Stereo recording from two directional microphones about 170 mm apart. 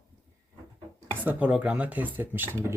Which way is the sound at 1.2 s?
10° right (ahead or behind).